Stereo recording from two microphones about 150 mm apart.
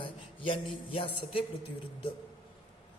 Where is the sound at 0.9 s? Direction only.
35° left (ahead or behind).